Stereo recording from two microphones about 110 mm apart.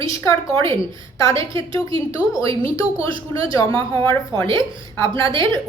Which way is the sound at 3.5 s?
30° left (ahead or behind).